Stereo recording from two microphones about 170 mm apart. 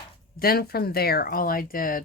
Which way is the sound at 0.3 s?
65° left (ahead or behind).